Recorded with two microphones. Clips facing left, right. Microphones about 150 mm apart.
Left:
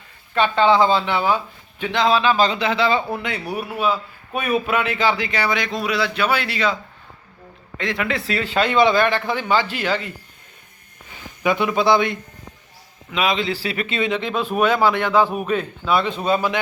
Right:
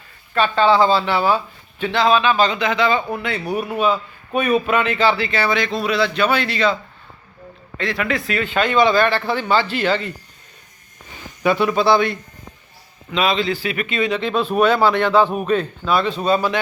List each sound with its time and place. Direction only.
0.3 s a man's voice: 20° left (ahead or behind)
2.1 s a man's voice: 35° left (ahead or behind); by 6.7 s 10° left (ahead or behind)
7.8 s speech: 20° left (ahead or behind)
11.4 s a man's voice: 15° left (ahead or behind)
13.5 s a man's voice: 30° left (ahead or behind)